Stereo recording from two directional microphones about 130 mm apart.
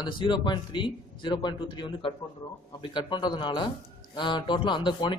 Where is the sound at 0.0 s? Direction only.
35° left (ahead or behind).